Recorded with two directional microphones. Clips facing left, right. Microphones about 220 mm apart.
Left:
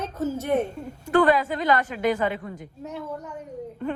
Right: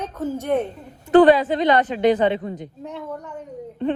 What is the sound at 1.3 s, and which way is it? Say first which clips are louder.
A woman's voice: right 5 dB; 20° right (ahead or behind).